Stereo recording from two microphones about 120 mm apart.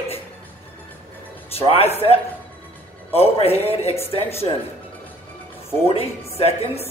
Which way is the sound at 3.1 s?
55° left (ahead or behind).